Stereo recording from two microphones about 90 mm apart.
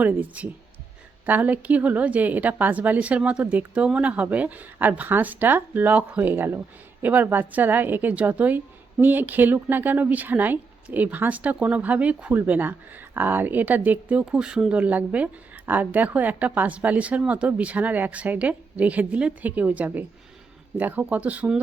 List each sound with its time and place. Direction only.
0.0 s a woman's voice: 20° right (ahead or behind)